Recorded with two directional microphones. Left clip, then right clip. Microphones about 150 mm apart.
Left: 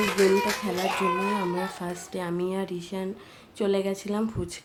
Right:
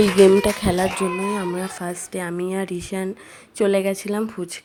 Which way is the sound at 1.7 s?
30° right (ahead or behind).